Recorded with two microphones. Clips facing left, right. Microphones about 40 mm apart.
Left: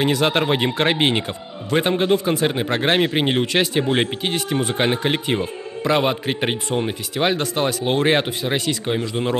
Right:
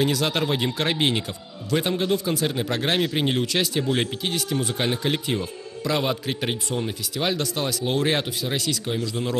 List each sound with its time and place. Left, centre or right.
0.0 s a man's voice: left